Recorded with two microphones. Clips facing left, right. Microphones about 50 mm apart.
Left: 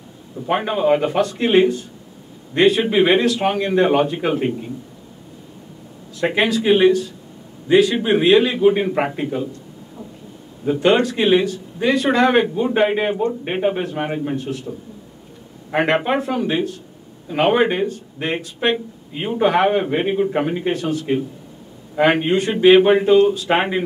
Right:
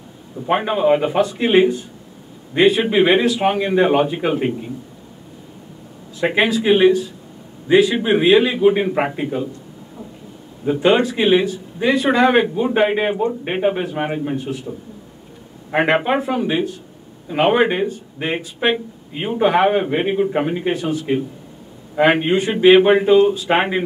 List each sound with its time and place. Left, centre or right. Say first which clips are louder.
0.5 s speech: right 1 dB; centre
6.1 s speech: right 1 dB; centre
10.6 s speech: right 1 dB; centre